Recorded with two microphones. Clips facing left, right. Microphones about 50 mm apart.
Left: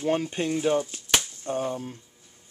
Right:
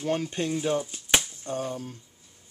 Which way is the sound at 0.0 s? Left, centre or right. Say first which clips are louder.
Left 2 dB; centre.